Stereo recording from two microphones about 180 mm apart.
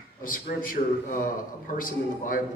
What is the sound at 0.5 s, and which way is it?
Speech, 55° left (ahead or behind).